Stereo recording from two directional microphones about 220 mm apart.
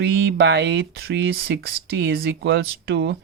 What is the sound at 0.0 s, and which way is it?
Speech, 50° right (ahead or behind).